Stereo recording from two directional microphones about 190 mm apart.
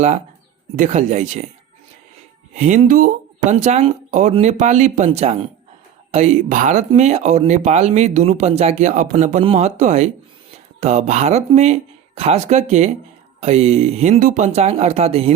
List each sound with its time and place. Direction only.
0.8 s speech: 40° right (ahead or behind)
2.6 s speech: 40° right (ahead or behind)